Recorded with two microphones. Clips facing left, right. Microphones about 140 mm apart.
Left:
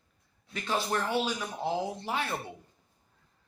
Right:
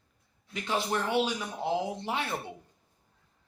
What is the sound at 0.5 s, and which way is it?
Speech, 15° right (ahead or behind).